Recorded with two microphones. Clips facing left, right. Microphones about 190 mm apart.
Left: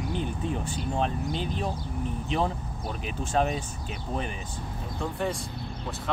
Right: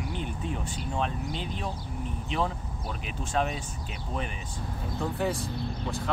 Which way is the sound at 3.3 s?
40° left (ahead or behind).